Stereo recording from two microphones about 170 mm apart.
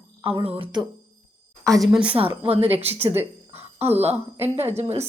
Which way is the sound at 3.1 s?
35° right (ahead or behind).